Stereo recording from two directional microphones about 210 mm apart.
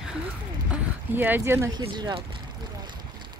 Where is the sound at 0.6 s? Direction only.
10° right (ahead or behind).